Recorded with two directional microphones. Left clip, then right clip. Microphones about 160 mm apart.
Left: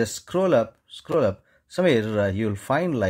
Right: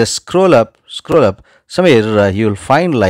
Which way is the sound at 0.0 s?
40° right (ahead or behind).